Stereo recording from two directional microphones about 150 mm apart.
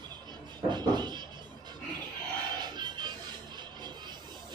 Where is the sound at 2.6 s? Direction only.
30° right (ahead or behind).